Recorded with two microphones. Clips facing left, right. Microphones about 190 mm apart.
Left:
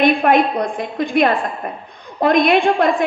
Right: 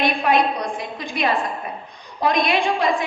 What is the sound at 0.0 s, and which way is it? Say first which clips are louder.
A woman's voice: left 5 dB; 55° left (ahead or behind).